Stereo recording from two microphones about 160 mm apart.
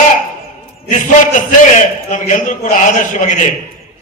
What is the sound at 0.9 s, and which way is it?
A man's voice, 55° left (ahead or behind).